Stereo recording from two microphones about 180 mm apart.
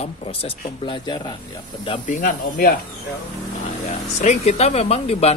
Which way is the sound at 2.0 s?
50° left (ahead or behind).